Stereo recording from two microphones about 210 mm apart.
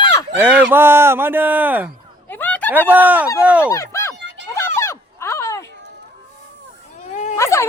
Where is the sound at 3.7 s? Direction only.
15° left (ahead or behind).